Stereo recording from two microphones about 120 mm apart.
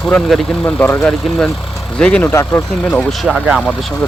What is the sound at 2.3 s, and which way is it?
Speech, 20° left (ahead or behind).